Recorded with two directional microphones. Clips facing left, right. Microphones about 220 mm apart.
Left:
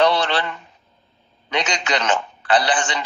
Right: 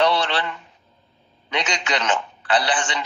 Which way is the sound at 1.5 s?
40° left (ahead or behind).